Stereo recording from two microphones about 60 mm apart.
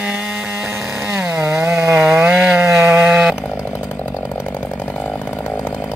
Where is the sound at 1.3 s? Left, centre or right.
Right.